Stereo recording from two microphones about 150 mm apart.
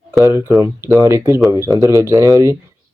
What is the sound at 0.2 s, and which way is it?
Speech, 20° right (ahead or behind).